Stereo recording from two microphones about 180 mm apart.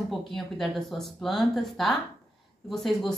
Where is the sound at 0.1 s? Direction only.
Centre (ahead or behind).